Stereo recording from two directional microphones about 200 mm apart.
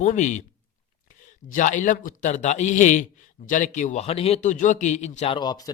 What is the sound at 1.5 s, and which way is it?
Speech, 40° left (ahead or behind).